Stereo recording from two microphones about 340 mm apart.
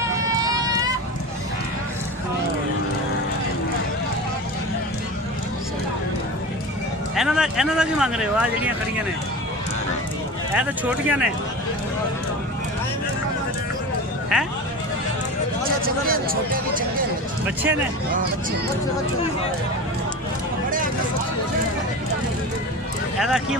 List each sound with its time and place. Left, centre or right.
0.4 s run: centre
7.2 s speech: centre
10.5 s speech: centre
14.3 s speech: centre
15.8 s speech: right
23.1 s speech: centre